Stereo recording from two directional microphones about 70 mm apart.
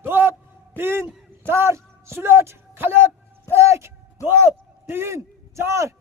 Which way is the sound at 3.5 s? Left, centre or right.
Right.